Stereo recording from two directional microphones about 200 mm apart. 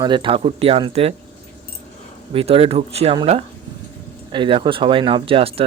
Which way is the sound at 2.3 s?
30° right (ahead or behind).